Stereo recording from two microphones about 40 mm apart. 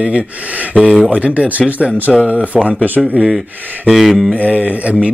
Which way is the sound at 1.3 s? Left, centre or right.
Right.